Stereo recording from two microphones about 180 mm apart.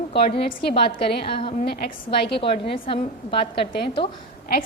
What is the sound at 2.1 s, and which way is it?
A woman's voice, 30° left (ahead or behind).